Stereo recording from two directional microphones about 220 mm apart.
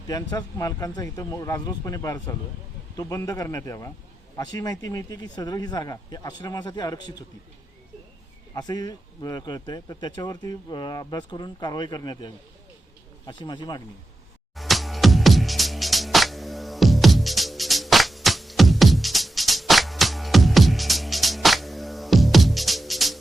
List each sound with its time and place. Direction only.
0.1 s speech: 15° left (ahead or behind)
8.5 s speech: 15° left (ahead or behind)
14.5 s music: centre (ahead or behind)